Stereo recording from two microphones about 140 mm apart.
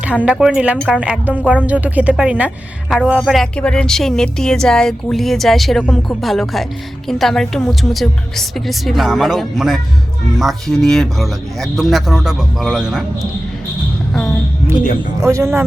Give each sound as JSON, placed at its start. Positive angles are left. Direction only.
{"t": 0.3, "sound": "a woman's voice", "side_deg": -5}
{"t": 14.1, "sound": "a sound", "side_deg": 5}
{"t": 15.2, "sound": "speech", "side_deg": -20}